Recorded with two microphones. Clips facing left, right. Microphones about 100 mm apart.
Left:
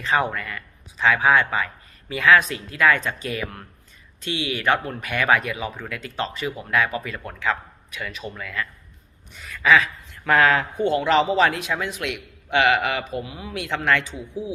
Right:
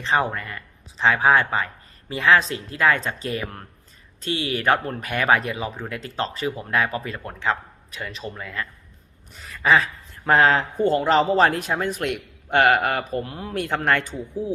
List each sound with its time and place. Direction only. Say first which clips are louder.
0.0 s a man's voice: even; 30° right (ahead or behind)